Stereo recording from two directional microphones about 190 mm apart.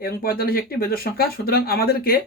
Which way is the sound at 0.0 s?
50° left (ahead or behind).